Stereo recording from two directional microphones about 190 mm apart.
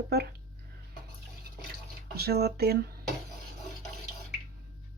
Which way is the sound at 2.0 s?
55° right (ahead or behind).